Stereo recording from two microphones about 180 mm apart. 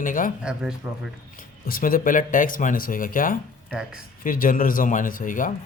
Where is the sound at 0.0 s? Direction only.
45° left (ahead or behind).